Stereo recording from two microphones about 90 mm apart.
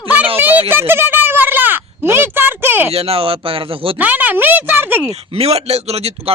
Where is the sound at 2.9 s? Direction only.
90° right.